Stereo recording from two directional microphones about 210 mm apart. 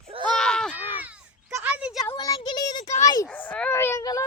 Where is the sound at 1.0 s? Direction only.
10° right (ahead or behind).